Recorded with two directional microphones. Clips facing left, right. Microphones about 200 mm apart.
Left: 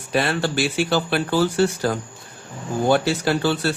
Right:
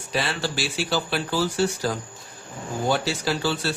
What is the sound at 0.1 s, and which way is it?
Speech, 55° left (ahead or behind).